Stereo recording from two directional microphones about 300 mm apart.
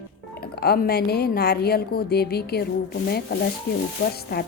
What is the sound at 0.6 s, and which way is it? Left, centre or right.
A woman's voice, left.